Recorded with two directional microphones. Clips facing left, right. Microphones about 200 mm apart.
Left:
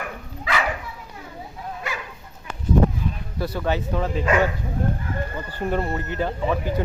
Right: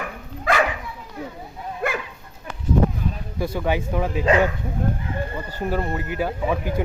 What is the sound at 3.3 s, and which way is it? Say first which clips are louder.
Speech: right 1 dB; 10° right (ahead or behind).